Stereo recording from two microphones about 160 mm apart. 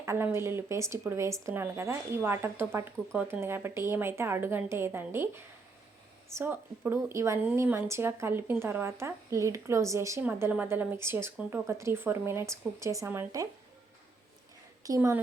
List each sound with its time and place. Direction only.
0.0 s a woman's voice: 15° right (ahead or behind)
14.8 s a woman's voice: 20° right (ahead or behind)